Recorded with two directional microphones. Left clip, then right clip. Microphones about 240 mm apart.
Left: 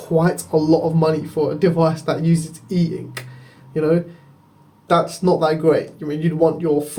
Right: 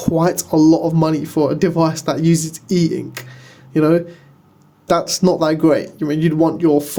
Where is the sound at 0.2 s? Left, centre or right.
Right.